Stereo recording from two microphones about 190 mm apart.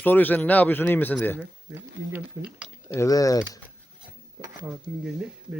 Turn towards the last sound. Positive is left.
turn(degrees=-5)  # may be behind; listen again after turning